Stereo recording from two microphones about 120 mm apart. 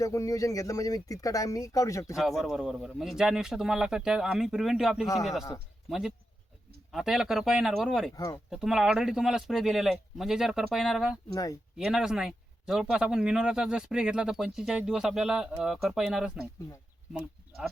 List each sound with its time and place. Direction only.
0.0 s speech: 25° left (ahead or behind)
2.4 s speech: centre (ahead or behind)
8.1 s speech: 30° left (ahead or behind)
8.4 s speech: 5° right (ahead or behind)